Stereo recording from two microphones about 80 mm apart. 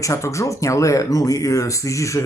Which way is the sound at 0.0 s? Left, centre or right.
Left.